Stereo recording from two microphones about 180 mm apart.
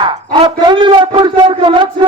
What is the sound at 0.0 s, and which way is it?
A man's voice, 25° right (ahead or behind).